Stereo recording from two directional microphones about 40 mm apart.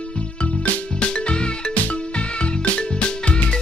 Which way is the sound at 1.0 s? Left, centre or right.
Left.